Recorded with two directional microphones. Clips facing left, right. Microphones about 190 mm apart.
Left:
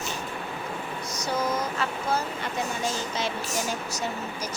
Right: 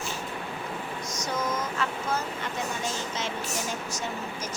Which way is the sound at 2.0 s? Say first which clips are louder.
Left 2 dB; 35° left (ahead or behind).